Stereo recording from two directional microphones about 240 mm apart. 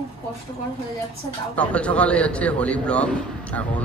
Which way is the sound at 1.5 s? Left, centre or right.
Centre.